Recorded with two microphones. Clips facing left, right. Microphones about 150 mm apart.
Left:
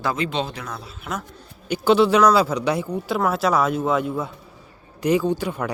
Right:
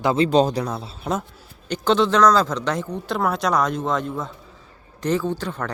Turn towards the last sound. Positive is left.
turn(degrees=10)  # may be behind; listen again after turning